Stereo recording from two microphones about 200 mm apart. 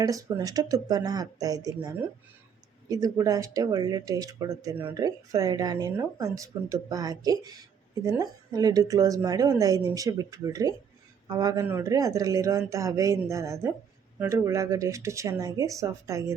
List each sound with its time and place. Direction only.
0.0 s speech: 15° right (ahead or behind)
2.9 s speech: 15° right (ahead or behind)